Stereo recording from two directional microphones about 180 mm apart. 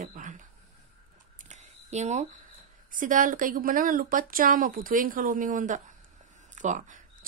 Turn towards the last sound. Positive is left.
turn(degrees=-45)  # may be behind; listen again after turning